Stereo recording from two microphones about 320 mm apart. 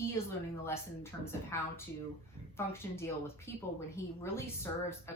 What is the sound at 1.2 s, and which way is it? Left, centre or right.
A woman's voice, centre.